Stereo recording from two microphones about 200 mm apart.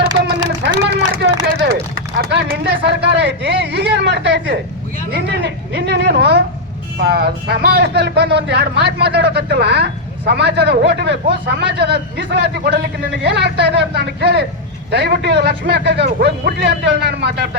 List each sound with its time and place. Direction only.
0.0 s run: 20° right (ahead or behind)
0.9 s a sound: 60° right (ahead or behind)
2.8 s a man's voice: 55° right (ahead or behind)